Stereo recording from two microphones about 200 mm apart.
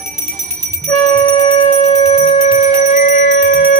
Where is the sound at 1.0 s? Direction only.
20° left (ahead or behind).